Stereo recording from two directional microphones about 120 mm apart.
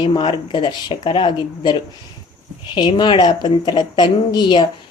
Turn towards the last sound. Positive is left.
turn(degrees=40)  # may be behind; listen again after turning